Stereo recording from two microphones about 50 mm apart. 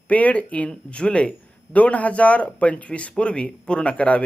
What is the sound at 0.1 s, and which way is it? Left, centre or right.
Speech, left.